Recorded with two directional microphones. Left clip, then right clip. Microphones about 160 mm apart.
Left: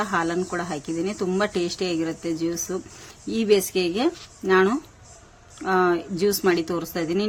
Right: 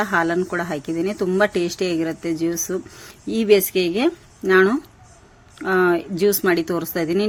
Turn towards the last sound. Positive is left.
turn(degrees=-15)  # may be behind; listen again after turning